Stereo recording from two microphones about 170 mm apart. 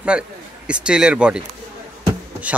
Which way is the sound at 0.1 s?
5° right (ahead or behind).